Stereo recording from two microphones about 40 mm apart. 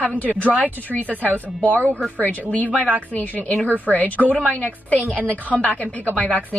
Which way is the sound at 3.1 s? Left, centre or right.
Left.